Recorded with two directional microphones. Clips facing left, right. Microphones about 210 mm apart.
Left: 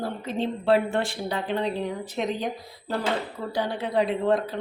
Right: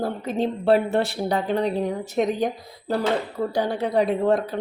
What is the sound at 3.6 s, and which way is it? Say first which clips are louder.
Speech: right 3 dB; 40° right (ahead or behind).